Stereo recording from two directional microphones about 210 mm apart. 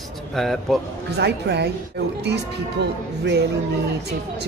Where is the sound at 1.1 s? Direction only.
50° right (ahead or behind).